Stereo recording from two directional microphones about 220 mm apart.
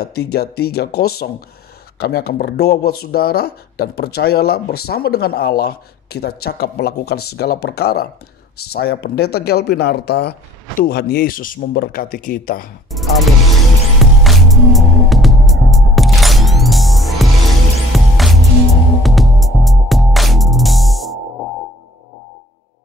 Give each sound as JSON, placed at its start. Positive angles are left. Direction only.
{"t": 0.0, "sound": "speech", "side_deg": 45}
{"t": 12.9, "sound": "music", "side_deg": 0}